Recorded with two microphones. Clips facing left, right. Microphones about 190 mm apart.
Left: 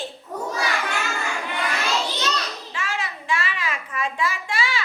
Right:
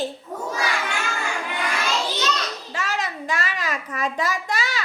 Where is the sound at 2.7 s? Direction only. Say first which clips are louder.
Right 3 dB; 40° right (ahead or behind).